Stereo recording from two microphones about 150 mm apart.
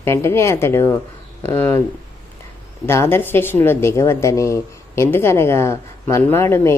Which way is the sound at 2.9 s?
15° left (ahead or behind).